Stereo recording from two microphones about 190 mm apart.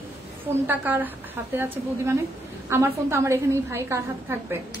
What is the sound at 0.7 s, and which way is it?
A woman's voice, 10° right (ahead or behind).